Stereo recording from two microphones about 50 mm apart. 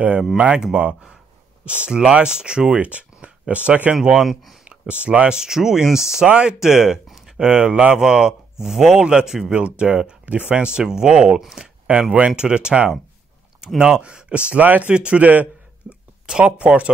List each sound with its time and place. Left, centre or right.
0.7 s speech: right
3.9 s speech: centre
4.3 s speech: centre
4.6 s speech: right
5.4 s speech: centre
6.2 s speech: right
6.6 s speech: centre; by 8.0 s right
8.0 s speech: centre
10.7 s speech: centre; by 15.4 s right
15.8 s a sound: right
16.3 s speech: centre